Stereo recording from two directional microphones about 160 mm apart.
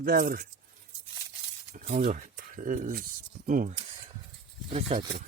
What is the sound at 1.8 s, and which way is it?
Speech, 50° right (ahead or behind).